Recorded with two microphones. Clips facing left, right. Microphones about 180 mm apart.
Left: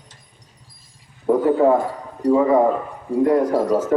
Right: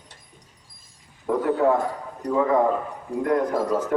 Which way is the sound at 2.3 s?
10° left (ahead or behind).